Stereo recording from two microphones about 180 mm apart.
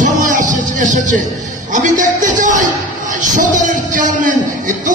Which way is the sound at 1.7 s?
45° right (ahead or behind).